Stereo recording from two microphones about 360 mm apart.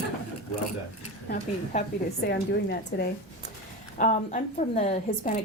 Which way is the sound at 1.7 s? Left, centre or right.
Centre.